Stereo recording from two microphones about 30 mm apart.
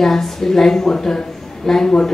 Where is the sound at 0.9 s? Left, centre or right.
Left.